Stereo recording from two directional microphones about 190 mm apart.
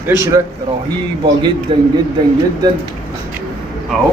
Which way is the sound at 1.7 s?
25° right (ahead or behind).